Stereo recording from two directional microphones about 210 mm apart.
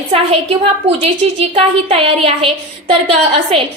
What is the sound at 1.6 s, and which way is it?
A woman's voice, 25° right (ahead or behind).